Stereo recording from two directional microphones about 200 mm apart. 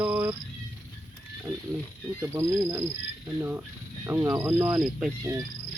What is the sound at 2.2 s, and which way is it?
Speech, 15° right (ahead or behind).